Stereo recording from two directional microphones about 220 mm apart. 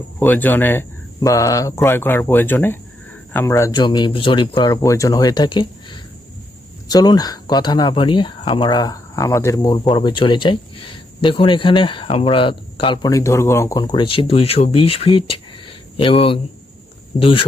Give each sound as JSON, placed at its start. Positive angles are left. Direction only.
{"t": 0.2, "sound": "speech", "side_deg": 10}